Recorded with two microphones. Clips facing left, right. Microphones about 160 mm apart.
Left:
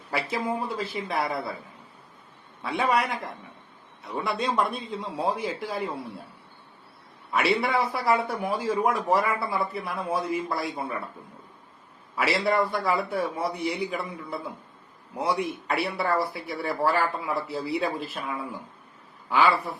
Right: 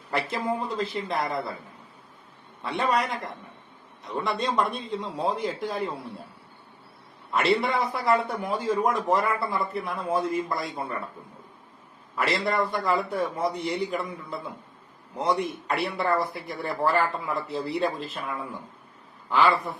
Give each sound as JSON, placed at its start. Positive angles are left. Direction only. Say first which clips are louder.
{"t": 0.1, "sound": "a man's voice", "louder": "right 1 dB", "side_deg": 5}
{"t": 2.6, "sound": "a man's voice", "louder": "left 1 dB", "side_deg": 10}
{"t": 4.0, "sound": "a man's voice", "louder": "even", "side_deg": 5}
{"t": 7.3, "sound": "a man's voice", "louder": "right 1 dB", "side_deg": 5}
{"t": 12.1, "sound": "a man's voice", "louder": "left 2 dB", "side_deg": 5}